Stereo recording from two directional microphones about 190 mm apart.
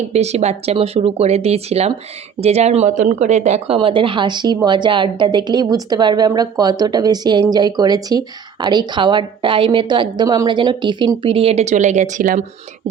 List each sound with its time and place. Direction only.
0.1 s speech: 35° right (ahead or behind)